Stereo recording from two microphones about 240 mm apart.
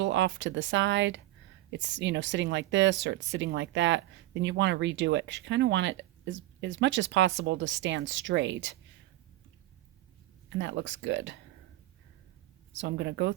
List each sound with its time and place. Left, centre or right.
0.0 s speech: right
10.6 s speech: right
12.7 s speech: right